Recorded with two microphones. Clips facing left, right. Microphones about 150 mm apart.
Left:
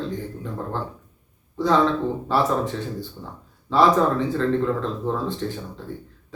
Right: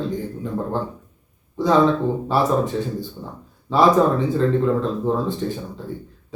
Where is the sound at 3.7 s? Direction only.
15° right (ahead or behind).